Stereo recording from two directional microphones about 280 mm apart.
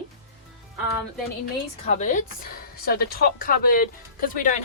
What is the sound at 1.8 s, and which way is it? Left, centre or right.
A woman's voice, left.